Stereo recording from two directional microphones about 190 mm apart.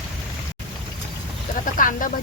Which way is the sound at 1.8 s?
45° left (ahead or behind).